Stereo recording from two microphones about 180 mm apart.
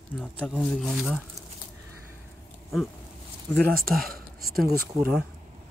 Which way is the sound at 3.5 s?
5° left (ahead or behind).